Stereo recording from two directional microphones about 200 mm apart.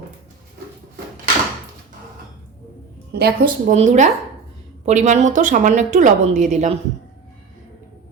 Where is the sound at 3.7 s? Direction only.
35° right (ahead or behind).